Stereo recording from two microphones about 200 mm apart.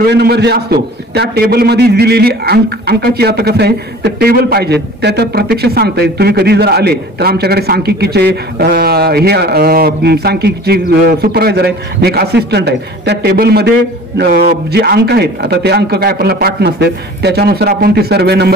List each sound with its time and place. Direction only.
0.0 s a man's voice: 55° right (ahead or behind)